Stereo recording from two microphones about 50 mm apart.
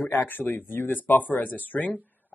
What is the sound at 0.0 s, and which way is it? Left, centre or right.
Speech, left.